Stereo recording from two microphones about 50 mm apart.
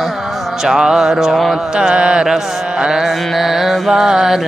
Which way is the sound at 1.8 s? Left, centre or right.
Centre.